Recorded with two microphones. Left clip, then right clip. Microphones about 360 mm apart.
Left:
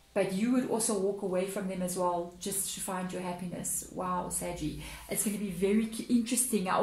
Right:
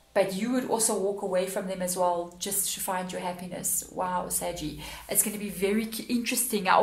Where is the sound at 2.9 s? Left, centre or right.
Right.